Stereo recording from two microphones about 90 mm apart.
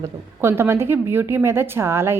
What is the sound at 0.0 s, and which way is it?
A woman's voice, 25° right (ahead or behind).